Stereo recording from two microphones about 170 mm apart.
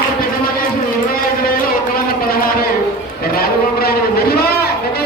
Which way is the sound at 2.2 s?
60° left (ahead or behind).